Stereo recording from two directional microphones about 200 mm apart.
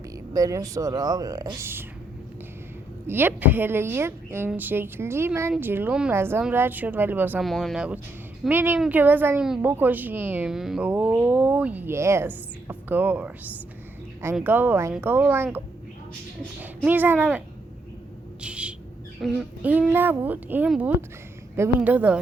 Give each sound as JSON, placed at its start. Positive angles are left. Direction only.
{"t": 0.3, "sound": "a woman's voice", "side_deg": -15}
{"t": 3.1, "sound": "a woman's voice", "side_deg": -10}
{"t": 18.4, "sound": "owl", "side_deg": -5}
{"t": 19.2, "sound": "a woman's voice", "side_deg": -5}